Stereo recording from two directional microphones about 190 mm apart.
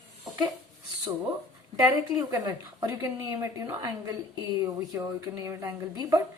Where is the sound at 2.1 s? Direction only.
20° right (ahead or behind).